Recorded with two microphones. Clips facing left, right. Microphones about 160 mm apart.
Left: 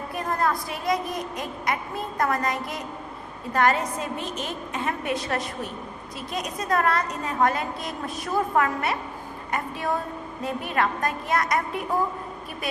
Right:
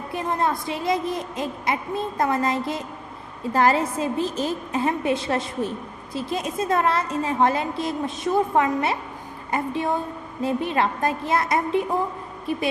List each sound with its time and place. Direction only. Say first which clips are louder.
0.1 s a woman's voice: right 2 dB; 25° right (ahead or behind)